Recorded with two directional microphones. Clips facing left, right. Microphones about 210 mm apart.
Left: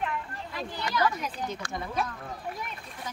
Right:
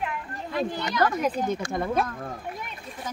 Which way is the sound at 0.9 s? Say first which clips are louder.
Right 4 dB; 50° right (ahead or behind).